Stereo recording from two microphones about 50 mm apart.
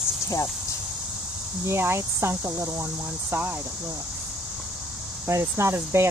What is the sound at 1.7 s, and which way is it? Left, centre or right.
Speech, right.